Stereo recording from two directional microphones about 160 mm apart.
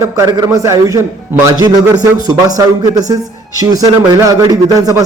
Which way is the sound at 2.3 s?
25° right (ahead or behind).